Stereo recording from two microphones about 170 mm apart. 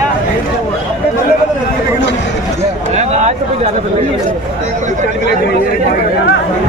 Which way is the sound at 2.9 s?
40° right (ahead or behind).